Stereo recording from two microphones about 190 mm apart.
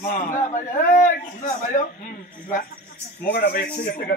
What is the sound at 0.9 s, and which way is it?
Speech, 45° left (ahead or behind).